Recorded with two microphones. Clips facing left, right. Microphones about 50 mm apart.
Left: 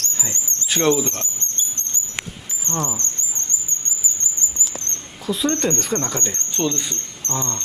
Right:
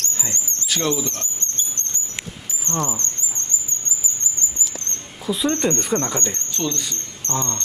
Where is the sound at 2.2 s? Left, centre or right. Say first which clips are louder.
Left 3 dB; left.